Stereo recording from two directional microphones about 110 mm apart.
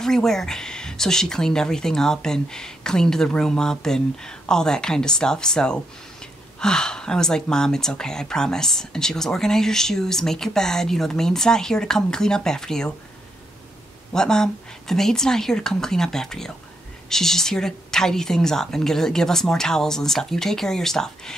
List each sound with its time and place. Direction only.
0.0 s speech: 5° left (ahead or behind)
14.1 s speech: 5° left (ahead or behind)